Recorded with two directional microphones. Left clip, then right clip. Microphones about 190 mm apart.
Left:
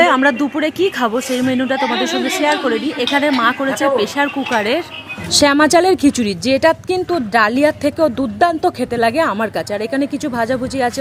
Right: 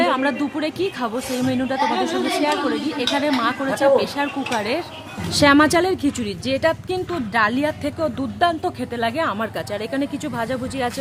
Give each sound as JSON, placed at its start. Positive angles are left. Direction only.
{"t": 0.0, "sound": "speech", "side_deg": 30}
{"t": 5.3, "sound": "a woman's voice", "side_deg": 35}